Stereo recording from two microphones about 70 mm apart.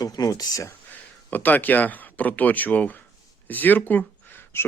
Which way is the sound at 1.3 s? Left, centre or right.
Left.